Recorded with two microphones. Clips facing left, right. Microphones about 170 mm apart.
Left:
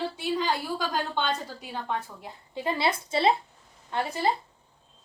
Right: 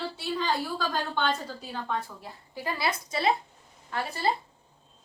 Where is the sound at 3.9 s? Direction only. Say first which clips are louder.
Left 3 dB; 15° left (ahead or behind).